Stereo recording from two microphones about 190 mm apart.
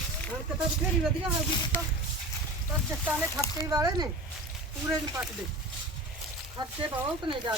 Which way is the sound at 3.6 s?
20° right (ahead or behind).